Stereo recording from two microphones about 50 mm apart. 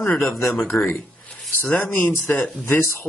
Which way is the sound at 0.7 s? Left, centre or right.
Left.